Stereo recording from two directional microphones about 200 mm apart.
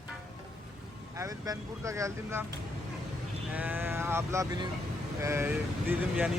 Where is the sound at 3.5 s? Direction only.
10° right (ahead or behind).